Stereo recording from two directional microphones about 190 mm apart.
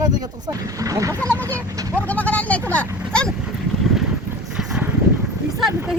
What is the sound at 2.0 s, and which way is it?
Speech, 10° left (ahead or behind).